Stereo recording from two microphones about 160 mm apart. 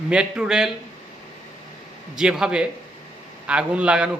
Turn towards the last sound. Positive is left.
turn(degrees=-5)  # may be behind; listen again after turning